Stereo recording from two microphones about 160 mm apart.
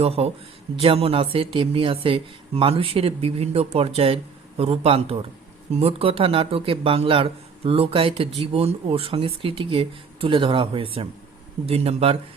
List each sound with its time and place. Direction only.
0.0 s speech: 40° right (ahead or behind)